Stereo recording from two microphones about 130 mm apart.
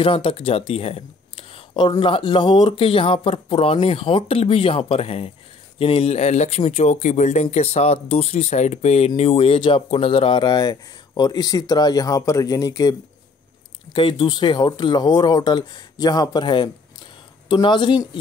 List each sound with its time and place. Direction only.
0.0 s speech: 45° left (ahead or behind); by 12.9 s 30° left (ahead or behind)
13.9 s speech: 40° left (ahead or behind)